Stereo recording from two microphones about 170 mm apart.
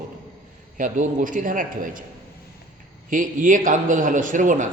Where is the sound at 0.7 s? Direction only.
50° right (ahead or behind).